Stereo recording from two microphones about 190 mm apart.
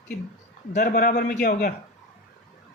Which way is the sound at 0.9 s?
60° left (ahead or behind).